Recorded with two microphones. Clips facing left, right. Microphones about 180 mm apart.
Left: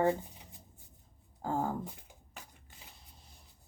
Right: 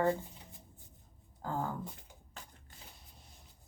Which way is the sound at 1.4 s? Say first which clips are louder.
Left 4 dB; 35° left (ahead or behind).